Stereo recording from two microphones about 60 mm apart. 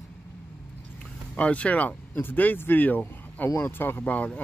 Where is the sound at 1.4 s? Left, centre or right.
Left.